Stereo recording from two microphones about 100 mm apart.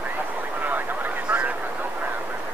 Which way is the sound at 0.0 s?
15° right (ahead or behind).